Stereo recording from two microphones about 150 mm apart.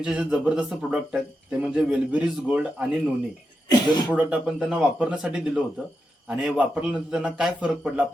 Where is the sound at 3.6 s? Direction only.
25° left (ahead or behind).